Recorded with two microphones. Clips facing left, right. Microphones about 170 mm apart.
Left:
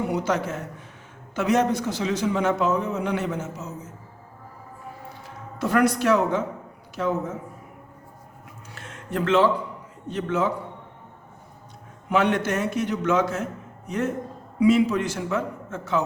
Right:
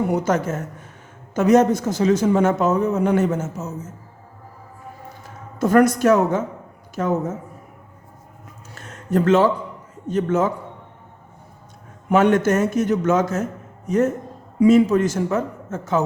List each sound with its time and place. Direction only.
0.1 s a man's voice: 45° right (ahead or behind)
5.2 s a man's voice: 45° right (ahead or behind)
8.7 s a sound: 40° right (ahead or behind)
10.1 s a man's voice: 45° right (ahead or behind)
12.0 s a man's voice: 45° right (ahead or behind)